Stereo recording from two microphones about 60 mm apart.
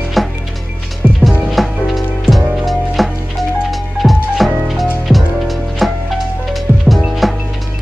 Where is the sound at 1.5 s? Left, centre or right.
Centre.